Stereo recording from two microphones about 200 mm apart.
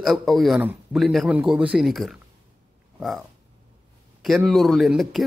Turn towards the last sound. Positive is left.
turn(degrees=0)  # may be behind; listen again after turning